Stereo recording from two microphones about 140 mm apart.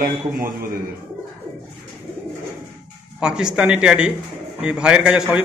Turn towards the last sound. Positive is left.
turn(degrees=-10)  # may be behind; listen again after turning